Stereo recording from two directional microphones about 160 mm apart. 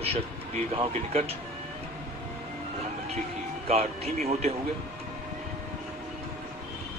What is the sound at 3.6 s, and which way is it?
Speech, 40° right (ahead or behind).